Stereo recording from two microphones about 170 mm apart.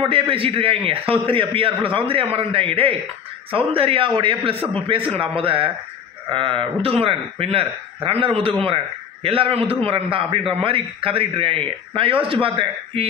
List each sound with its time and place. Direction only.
0.0 s a man's voice: 30° right (ahead or behind)